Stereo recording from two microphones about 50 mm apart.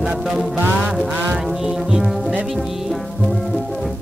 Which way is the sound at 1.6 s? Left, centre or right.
Centre.